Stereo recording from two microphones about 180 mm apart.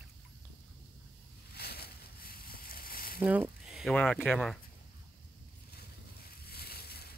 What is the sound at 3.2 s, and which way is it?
Sizzle, 10° right (ahead or behind).